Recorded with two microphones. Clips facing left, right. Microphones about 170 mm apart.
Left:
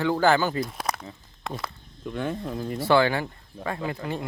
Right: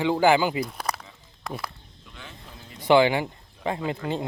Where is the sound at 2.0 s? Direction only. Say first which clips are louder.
Left 17 dB; 55° left (ahead or behind).